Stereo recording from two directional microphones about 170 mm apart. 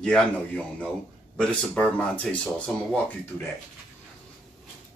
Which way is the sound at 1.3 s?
5° left (ahead or behind).